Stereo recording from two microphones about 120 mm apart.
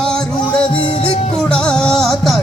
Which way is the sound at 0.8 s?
50° left (ahead or behind).